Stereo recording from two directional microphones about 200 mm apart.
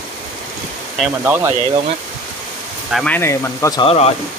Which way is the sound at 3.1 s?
15° left (ahead or behind).